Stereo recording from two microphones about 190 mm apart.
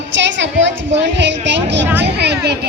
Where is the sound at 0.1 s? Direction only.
70° right (ahead or behind).